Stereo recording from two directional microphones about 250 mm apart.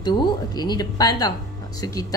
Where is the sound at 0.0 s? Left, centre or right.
Centre.